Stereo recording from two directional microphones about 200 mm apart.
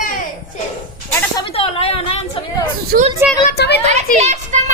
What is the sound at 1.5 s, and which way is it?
Speech, 30° left (ahead or behind).